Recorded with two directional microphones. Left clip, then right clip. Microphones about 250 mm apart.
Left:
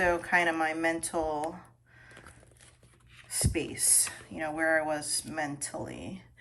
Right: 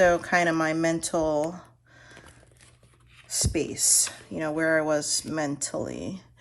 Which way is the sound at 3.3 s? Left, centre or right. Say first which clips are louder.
Right 5 dB; centre.